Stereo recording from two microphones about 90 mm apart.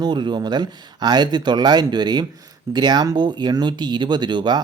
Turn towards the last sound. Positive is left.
turn(degrees=-55)  # may be behind; listen again after turning